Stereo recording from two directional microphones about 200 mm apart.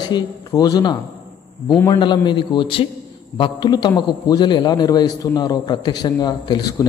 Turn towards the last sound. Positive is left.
turn(degrees=20)  # may be behind; listen again after turning